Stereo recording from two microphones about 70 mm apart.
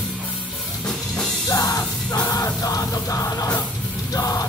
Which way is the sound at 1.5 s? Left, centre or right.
Left.